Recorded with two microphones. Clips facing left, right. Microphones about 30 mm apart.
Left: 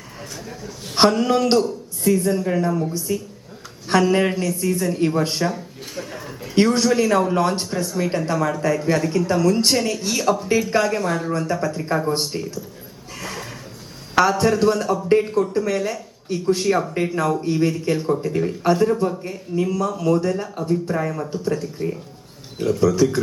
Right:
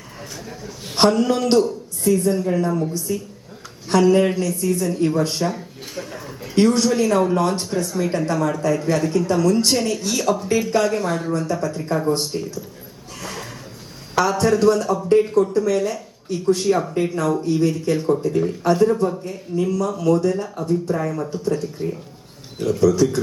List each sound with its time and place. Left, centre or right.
0.2 s a man's voice: centre
0.9 s a man's voice: centre
4.1 s speech: centre
5.5 s a sound: centre
6.7 s a man's voice: centre
11.3 s speech: centre
13.2 s a sound: centre
14.3 s a man's voice: centre